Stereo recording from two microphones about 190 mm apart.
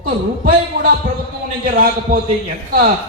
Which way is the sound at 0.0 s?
50° right (ahead or behind).